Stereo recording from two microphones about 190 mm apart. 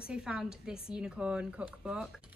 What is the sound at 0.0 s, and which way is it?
A woman's voice, 5° right (ahead or behind).